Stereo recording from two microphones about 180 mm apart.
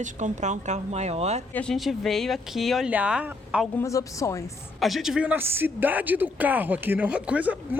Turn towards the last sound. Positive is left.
turn(degrees=-10)  # may be behind; listen again after turning